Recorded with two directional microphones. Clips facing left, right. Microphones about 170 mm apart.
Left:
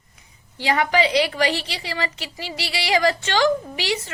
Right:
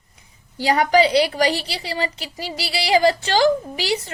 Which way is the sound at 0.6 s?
40° right (ahead or behind).